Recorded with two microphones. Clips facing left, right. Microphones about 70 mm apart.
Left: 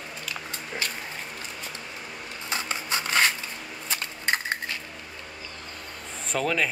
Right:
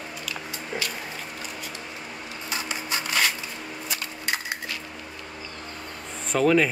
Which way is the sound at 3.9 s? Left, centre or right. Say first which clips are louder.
Left 3 dB; left.